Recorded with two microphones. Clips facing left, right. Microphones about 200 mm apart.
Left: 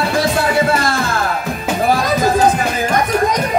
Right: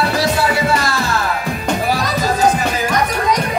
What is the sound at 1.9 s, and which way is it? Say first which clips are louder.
Music: left 3 dB; 50° left (ahead or behind).